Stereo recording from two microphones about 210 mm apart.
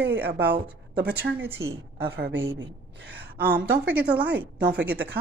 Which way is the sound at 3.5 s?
5° right (ahead or behind).